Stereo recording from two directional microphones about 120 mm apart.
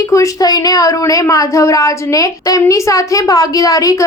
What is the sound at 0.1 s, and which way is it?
Speech, 30° left (ahead or behind).